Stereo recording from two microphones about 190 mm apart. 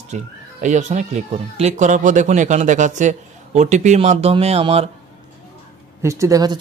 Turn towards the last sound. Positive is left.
turn(degrees=-20)  # may be behind; listen again after turning